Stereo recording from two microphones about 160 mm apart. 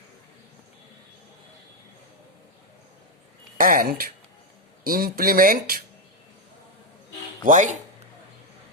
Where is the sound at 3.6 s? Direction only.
60° right (ahead or behind).